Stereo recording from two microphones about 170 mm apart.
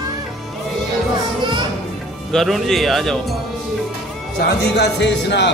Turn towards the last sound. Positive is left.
turn(degrees=90)